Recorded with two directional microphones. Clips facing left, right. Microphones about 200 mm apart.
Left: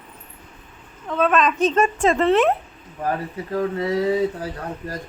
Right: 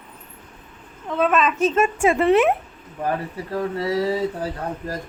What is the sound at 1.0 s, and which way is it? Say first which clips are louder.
A woman's voice: left 1 dB; 10° right (ahead or behind).